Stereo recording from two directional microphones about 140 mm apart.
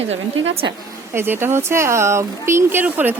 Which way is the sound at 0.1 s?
45° right (ahead or behind).